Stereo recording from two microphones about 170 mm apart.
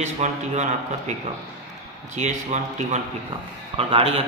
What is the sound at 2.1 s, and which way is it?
A man's voice, 45° right (ahead or behind).